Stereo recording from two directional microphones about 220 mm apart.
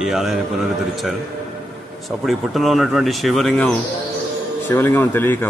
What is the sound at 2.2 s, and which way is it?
Speech, centre (ahead or behind).